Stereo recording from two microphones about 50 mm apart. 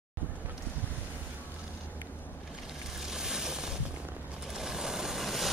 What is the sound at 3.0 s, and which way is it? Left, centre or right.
Boat, centre.